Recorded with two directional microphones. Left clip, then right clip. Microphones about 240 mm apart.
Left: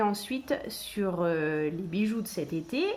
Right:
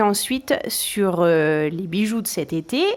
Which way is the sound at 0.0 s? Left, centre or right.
Right.